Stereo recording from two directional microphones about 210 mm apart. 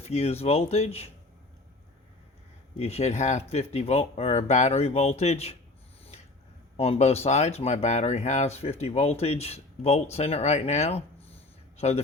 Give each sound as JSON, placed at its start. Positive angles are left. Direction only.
{"t": 0.0, "sound": "speech", "side_deg": 30}
{"t": 2.7, "sound": "speech", "side_deg": 30}
{"t": 6.7, "sound": "speech", "side_deg": 30}